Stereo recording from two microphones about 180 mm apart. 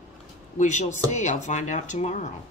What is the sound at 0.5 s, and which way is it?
Speech, 45° left (ahead or behind).